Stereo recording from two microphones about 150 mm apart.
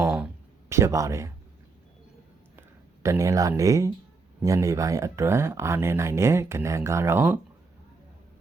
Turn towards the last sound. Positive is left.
turn(degrees=-15)  # may be behind; listen again after turning